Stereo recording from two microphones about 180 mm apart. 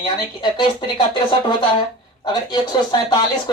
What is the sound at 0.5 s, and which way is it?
Speech, 25° left (ahead or behind).